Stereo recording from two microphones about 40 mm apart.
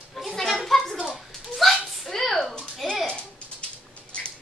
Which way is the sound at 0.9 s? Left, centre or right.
Right.